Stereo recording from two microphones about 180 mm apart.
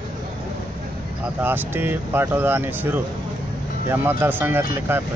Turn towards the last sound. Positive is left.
turn(degrees=-10)  # may be behind; listen again after turning